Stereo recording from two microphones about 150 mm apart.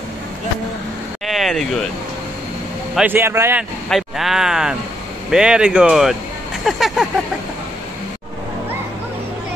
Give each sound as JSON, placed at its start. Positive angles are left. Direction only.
{"t": 1.2, "sound": "vehicle", "side_deg": 0}
{"t": 3.0, "sound": "speech", "side_deg": -15}
{"t": 3.9, "sound": "speech", "side_deg": 0}